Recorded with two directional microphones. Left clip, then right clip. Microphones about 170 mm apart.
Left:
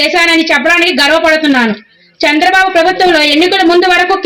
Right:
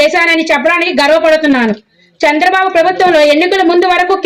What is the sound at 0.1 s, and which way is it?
A woman's voice, 30° right (ahead or behind).